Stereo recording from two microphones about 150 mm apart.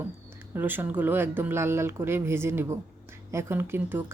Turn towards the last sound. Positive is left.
turn(degrees=-15)  # may be behind; listen again after turning